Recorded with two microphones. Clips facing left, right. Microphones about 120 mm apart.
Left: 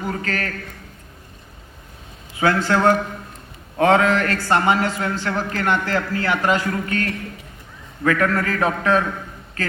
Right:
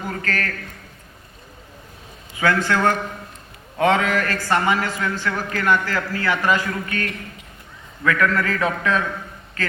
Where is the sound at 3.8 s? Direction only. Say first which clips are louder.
Left 3 dB; 35° left (ahead or behind).